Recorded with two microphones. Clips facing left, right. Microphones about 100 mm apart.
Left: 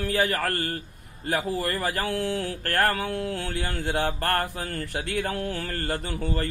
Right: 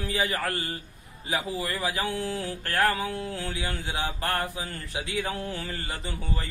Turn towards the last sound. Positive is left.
turn(degrees=60)  # may be behind; listen again after turning